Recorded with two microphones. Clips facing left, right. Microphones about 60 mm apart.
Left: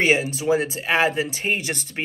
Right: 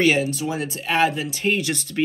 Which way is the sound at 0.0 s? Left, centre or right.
Left.